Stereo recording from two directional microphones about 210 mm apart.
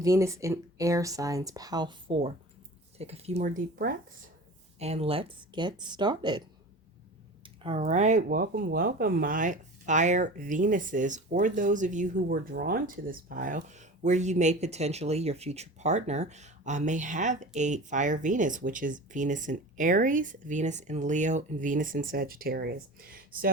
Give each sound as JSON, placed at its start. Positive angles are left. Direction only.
{"t": 0.0, "sound": "speech", "side_deg": -15}
{"t": 4.8, "sound": "speech", "side_deg": -30}
{"t": 7.4, "sound": "speech", "side_deg": -25}